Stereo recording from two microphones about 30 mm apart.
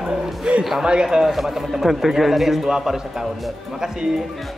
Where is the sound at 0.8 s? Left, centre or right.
Right.